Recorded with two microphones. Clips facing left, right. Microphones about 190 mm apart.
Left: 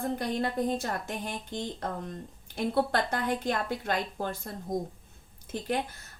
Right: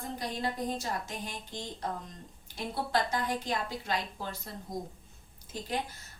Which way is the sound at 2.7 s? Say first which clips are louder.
Left 2 dB; 55° left (ahead or behind).